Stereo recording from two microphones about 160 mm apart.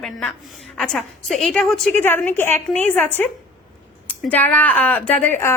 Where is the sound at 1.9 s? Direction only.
10° left (ahead or behind).